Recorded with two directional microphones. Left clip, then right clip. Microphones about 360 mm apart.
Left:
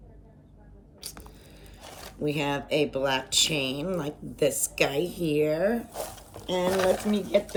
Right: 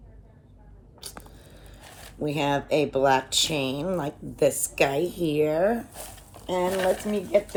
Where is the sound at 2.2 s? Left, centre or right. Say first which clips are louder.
Right 3 dB; centre.